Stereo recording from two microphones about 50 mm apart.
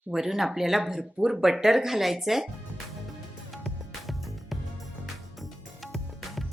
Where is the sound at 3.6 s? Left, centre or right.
Centre.